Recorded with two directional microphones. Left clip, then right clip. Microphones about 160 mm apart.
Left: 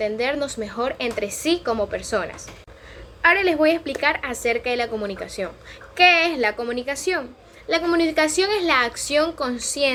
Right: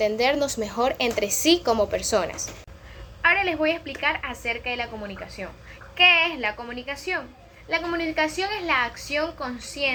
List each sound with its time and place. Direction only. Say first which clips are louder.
0.0 s a woman's voice: right 1 dB; 20° left (ahead or behind)
3.2 s a woman's voice: left 4 dB; 35° left (ahead or behind)